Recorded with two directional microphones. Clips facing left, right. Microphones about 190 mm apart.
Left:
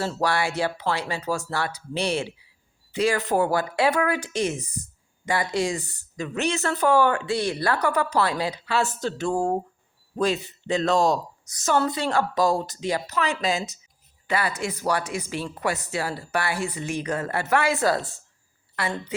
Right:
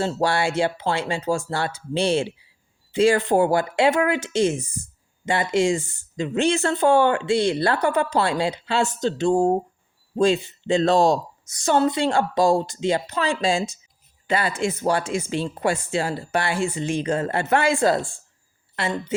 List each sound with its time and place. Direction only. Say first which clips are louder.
0.0 s speech: right 3 dB; 25° right (ahead or behind)